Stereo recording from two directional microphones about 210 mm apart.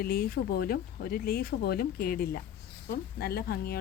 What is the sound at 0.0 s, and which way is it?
Speech, 45° left (ahead or behind).